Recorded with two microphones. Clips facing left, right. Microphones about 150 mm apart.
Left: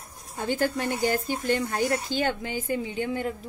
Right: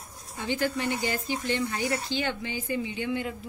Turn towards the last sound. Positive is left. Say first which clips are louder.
# left 2 dB
turn(degrees=40)  # may be behind; listen again after turning